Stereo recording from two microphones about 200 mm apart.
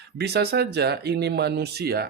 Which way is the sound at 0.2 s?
55° right (ahead or behind).